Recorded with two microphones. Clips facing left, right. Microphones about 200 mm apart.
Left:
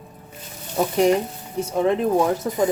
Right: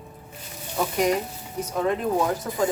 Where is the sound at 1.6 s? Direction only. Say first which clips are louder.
Left 5 dB; 25° left (ahead or behind).